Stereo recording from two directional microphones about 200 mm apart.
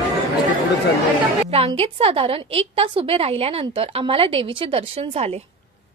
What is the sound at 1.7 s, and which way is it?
A woman's voice, 30° right (ahead or behind).